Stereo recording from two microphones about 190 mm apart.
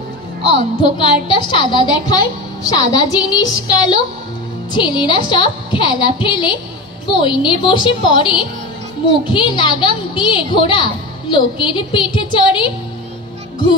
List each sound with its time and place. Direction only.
0.4 s a woman's voice: 25° left (ahead or behind)